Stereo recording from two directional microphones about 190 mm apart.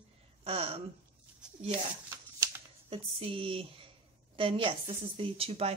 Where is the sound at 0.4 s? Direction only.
30° right (ahead or behind).